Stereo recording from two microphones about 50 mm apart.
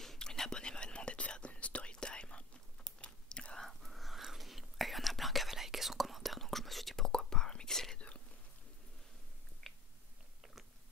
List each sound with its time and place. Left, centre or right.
0.0 s whispering: centre
3.6 s whispering: centre
7.1 s whispering: centre
9.6 s chewing: centre